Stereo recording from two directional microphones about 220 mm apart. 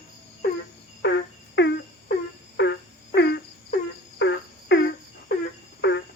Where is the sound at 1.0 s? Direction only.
50° left (ahead or behind).